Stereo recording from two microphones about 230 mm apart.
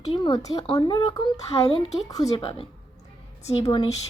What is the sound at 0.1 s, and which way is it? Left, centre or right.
A woman's voice, centre.